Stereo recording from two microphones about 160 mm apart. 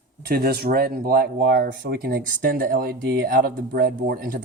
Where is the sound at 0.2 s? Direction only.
70° right (ahead or behind).